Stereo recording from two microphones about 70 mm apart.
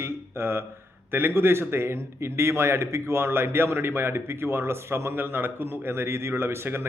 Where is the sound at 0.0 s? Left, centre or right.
Right.